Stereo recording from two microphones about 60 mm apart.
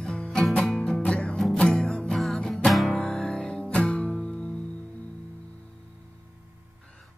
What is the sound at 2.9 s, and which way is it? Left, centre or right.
Music, centre.